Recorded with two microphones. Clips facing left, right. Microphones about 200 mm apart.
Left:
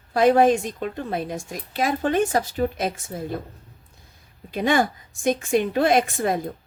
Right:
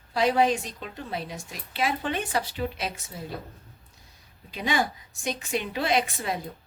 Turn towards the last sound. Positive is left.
turn(degrees=50)  # may be behind; listen again after turning